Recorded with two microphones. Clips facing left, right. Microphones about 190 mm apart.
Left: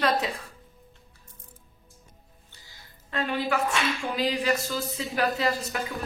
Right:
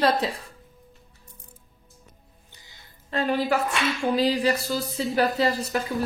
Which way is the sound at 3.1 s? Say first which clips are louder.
Right 4 dB; 35° right (ahead or behind).